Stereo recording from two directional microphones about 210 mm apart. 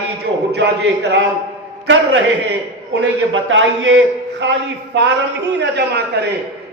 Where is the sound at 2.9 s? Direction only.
60° right (ahead or behind).